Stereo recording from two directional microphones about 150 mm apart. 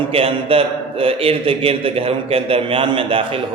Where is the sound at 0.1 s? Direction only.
40° right (ahead or behind).